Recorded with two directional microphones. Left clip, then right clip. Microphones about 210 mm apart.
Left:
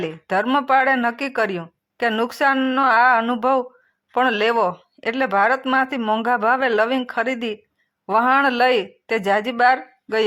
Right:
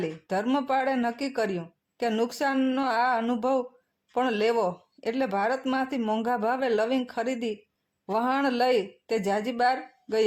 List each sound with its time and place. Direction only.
0.0 s speech: 5° left (ahead or behind)